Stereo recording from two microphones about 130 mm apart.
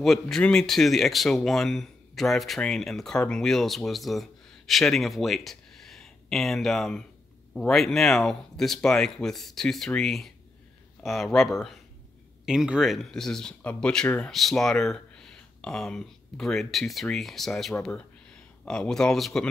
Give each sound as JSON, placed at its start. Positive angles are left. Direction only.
{"t": 0.0, "sound": "speech", "side_deg": 5}